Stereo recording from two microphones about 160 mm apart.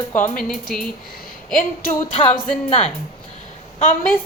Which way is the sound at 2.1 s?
40° left (ahead or behind).